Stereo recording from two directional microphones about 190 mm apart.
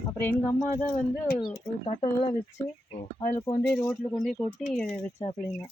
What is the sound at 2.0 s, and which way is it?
Speech, 35° left (ahead or behind).